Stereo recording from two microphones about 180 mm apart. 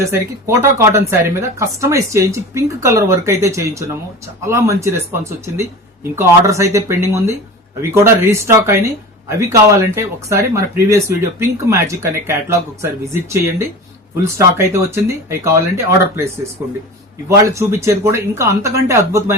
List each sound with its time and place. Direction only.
0.0 s speech: 15° right (ahead or behind)
17.2 s speech: 15° right (ahead or behind)